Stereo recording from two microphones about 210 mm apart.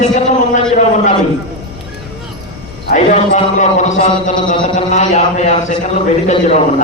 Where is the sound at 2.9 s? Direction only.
35° left (ahead or behind).